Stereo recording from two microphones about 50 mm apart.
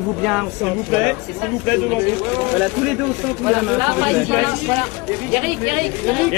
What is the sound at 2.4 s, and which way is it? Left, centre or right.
Speech, centre.